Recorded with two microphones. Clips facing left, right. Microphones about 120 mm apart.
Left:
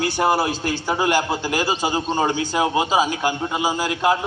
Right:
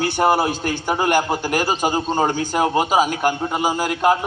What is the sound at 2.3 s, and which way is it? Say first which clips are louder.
A man's voice: right 1 dB; 45° right (ahead or behind).